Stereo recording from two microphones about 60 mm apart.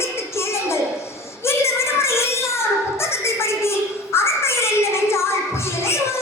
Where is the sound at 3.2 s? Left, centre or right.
Left.